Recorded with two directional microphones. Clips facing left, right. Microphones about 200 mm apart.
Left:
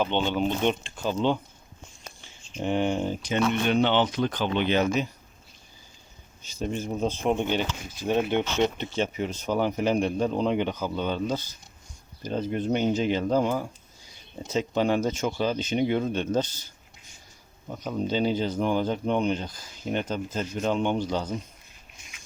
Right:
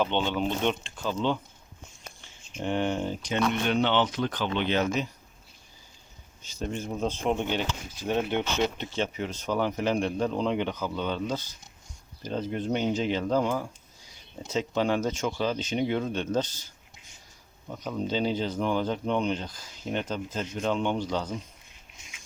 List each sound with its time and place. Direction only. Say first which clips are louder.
0.0 s speech: left 2 dB; 5° left (ahead or behind)
2.6 s speech: left 2 dB; 10° left (ahead or behind)
6.5 s speech: left 3 dB; 10° left (ahead or behind)
14.7 s speech: left 2 dB; 10° left (ahead or behind)
17.7 s speech: left 2 dB; 10° left (ahead or behind)